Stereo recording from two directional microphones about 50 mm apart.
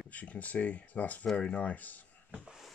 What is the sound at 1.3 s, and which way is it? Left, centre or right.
Speech, left.